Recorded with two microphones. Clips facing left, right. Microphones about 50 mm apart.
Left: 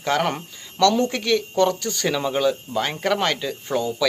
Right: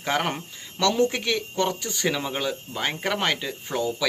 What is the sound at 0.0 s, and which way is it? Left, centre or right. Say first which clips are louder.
Speech: left 4 dB; centre.